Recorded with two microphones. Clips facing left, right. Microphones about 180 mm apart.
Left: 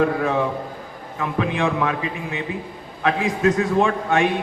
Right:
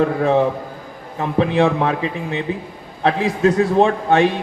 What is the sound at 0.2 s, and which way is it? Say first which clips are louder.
A man's voice: right 5 dB; 30° right (ahead or behind).